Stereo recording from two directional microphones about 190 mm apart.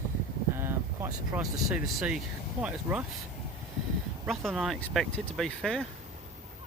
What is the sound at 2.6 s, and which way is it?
Speech, 5° right (ahead or behind).